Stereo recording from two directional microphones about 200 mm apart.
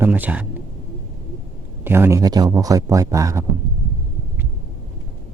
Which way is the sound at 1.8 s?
10° right (ahead or behind).